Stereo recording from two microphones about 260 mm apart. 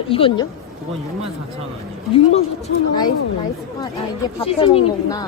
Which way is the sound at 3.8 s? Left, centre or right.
Centre.